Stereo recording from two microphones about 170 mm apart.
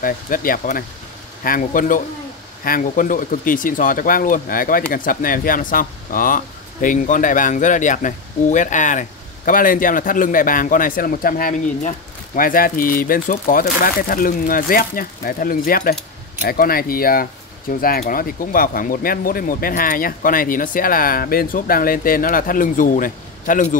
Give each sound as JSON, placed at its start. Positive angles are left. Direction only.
{"t": 0.0, "sound": "speech", "side_deg": 55}